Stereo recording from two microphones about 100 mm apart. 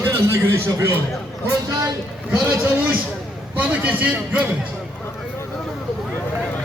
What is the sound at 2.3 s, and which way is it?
A man's voice, 10° right (ahead or behind).